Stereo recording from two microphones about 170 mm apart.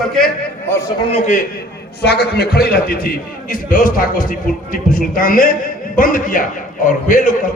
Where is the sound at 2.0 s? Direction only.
70° left (ahead or behind).